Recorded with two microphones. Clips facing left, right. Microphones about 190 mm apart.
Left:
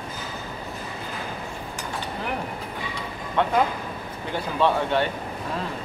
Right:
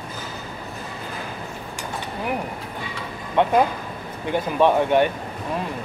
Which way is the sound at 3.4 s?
15° right (ahead or behind).